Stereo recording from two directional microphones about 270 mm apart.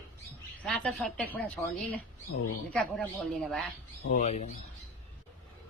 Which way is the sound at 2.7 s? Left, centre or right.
Centre.